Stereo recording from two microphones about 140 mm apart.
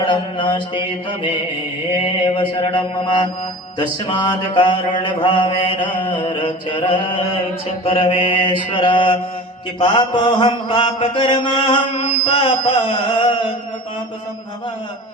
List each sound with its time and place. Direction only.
0.0 s mantra: 35° left (ahead or behind)